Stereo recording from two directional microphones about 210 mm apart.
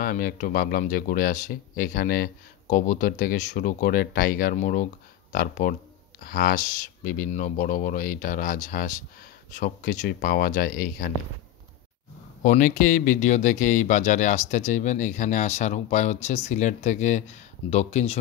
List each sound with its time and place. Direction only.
0.0 s speech: 45° left (ahead or behind)
12.4 s speech: 40° left (ahead or behind)